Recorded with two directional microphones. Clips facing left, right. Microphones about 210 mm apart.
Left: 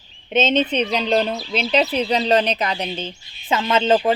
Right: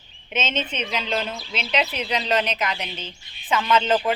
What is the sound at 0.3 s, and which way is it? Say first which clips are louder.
Speech: left 9 dB; 35° left (ahead or behind).